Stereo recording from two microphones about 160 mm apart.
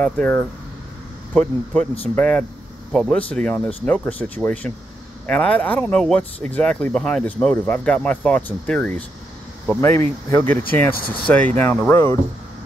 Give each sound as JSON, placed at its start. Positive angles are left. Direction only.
{"t": 0.0, "sound": "speech", "side_deg": 10}